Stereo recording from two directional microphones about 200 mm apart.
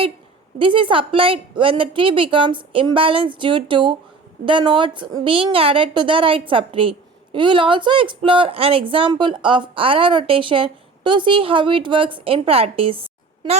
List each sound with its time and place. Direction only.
0.6 s speech: 25° right (ahead or behind)